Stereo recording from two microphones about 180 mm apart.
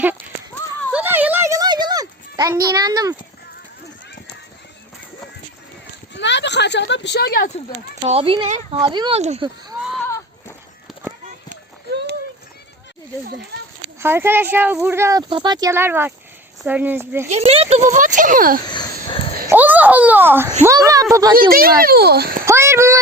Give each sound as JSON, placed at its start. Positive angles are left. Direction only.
{"t": 0.9, "sound": "a sound", "side_deg": -10}
{"t": 6.1, "sound": "speech", "side_deg": 75}
{"t": 8.0, "sound": "speech", "side_deg": -30}
{"t": 11.9, "sound": "clip-clop", "side_deg": -70}
{"t": 14.0, "sound": "speech", "side_deg": -10}
{"t": 15.3, "sound": "speech", "side_deg": -25}
{"t": 17.2, "sound": "a child's voice", "side_deg": -35}
{"t": 18.7, "sound": "a sound", "side_deg": 25}
{"t": 19.5, "sound": "a child's voice", "side_deg": -10}
{"t": 21.8, "sound": "a child's voice", "side_deg": -60}
{"t": 22.4, "sound": "a sound", "side_deg": -15}